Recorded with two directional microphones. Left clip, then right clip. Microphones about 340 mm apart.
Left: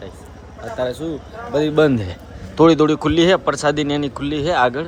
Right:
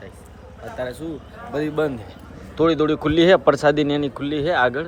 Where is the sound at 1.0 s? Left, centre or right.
Centre.